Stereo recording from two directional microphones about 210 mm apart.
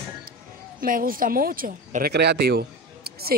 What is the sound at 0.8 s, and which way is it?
Speech, 40° right (ahead or behind).